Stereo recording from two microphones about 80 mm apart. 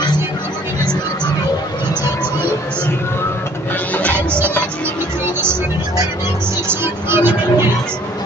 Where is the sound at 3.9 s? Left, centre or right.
Centre.